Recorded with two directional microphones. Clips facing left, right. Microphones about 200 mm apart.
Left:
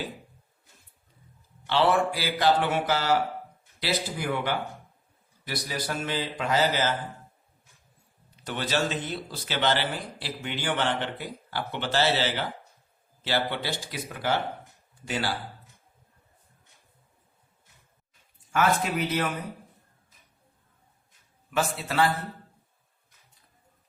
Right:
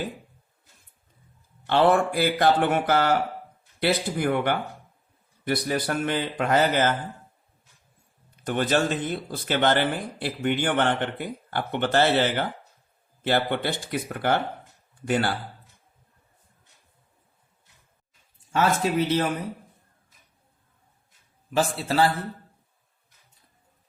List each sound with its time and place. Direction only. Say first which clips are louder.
1.6 s speech: right 3 dB; 50° right (ahead or behind)
8.4 s speech: right 5 dB; 50° right (ahead or behind)
18.5 s speech: right 2 dB; 30° right (ahead or behind)
21.5 s a man's voice: right 4 dB; 30° right (ahead or behind)